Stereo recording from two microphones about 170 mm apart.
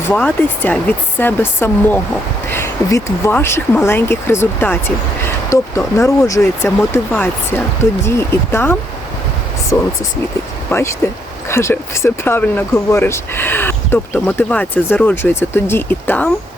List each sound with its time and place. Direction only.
0.0 s speech: 10° left (ahead or behind)
10.7 s speech: 15° left (ahead or behind)